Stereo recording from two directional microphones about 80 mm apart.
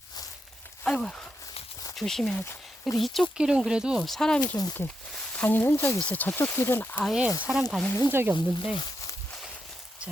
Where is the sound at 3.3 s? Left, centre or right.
Centre.